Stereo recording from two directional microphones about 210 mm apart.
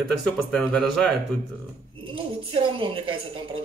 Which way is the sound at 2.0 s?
25° right (ahead or behind).